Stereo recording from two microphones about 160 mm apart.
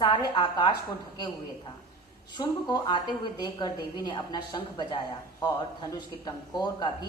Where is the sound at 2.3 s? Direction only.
25° left (ahead or behind).